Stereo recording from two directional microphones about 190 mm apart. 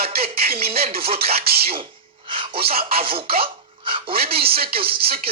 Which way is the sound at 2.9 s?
30° right (ahead or behind).